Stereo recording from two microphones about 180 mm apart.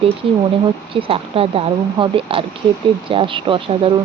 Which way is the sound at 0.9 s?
30° right (ahead or behind).